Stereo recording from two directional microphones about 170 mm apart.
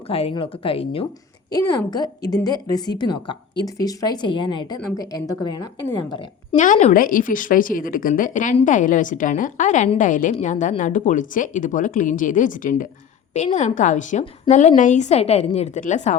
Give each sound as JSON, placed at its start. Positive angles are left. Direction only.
{"t": 0.1, "sound": "speech", "side_deg": 35}
{"t": 1.5, "sound": "a woman's voice", "side_deg": 25}
{"t": 6.6, "sound": "speech", "side_deg": 45}